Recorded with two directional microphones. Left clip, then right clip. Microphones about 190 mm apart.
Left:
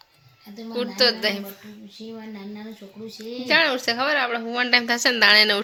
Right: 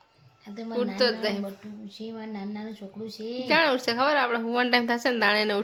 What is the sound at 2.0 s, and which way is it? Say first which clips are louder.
Speech: left 1 dB; 60° right (ahead or behind).